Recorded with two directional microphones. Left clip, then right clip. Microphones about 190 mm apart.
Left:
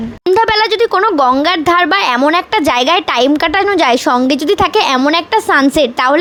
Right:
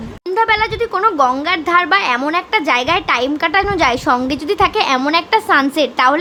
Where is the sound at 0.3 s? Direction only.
40° left (ahead or behind).